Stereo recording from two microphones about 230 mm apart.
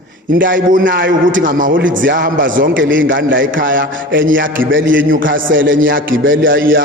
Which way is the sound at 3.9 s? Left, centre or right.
Right.